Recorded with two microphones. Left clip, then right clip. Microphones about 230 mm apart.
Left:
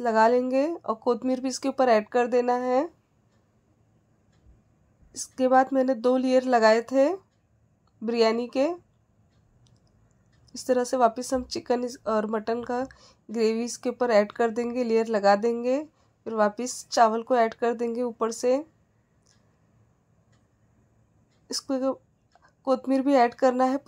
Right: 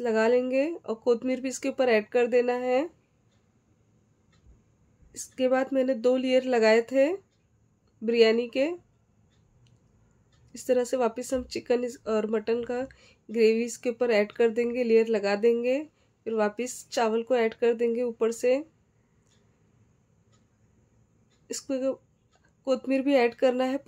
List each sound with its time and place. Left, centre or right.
0.0 s speech: centre
5.1 s speech: centre
10.5 s speech: centre
21.5 s speech: centre